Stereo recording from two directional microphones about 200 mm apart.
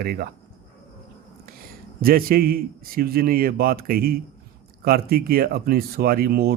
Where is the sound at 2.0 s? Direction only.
45° right (ahead or behind).